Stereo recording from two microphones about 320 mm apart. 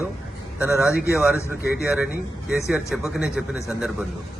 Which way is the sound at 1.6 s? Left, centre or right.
Left.